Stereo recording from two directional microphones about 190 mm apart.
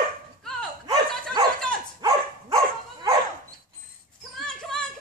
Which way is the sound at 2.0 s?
15° right (ahead or behind).